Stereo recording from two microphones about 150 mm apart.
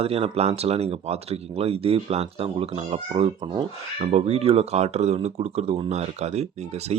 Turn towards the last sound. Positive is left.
turn(degrees=-45)  # may be behind; listen again after turning